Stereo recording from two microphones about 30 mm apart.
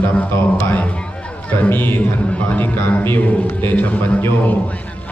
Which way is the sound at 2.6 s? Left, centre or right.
Left.